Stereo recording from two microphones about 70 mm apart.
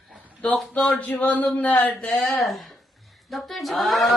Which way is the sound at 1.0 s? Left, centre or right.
Left.